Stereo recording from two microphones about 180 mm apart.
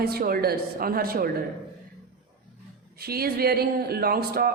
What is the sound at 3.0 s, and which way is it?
A woman's voice, 60° right (ahead or behind).